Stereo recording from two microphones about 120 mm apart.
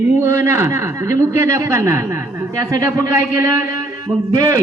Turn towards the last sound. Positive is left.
turn(degrees=-30)  # may be behind; listen again after turning